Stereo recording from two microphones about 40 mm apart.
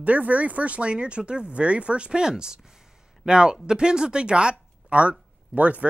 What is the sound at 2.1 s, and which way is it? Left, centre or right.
Speech, centre.